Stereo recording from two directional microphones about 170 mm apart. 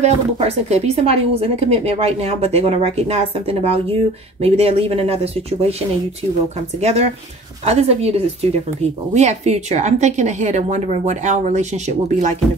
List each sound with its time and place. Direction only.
0.0 s a woman's voice: 40° right (ahead or behind)
6.8 s a woman's voice: 40° right (ahead or behind)